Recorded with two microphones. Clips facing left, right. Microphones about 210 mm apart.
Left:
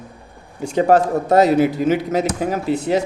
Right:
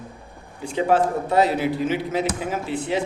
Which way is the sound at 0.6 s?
45° left (ahead or behind).